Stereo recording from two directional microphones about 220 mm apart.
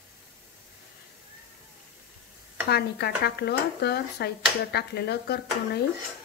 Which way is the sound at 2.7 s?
45° left (ahead or behind).